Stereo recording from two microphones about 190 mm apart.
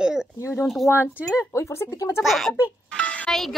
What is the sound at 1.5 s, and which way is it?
Speech, 15° left (ahead or behind).